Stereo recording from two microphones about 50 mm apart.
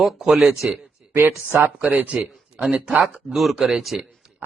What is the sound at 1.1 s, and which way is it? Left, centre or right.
Speech, right.